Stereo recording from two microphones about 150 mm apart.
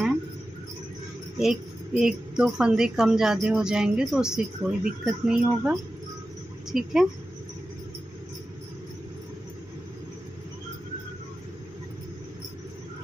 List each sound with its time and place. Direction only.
1.4 s a woman's voice: 5° right (ahead or behind)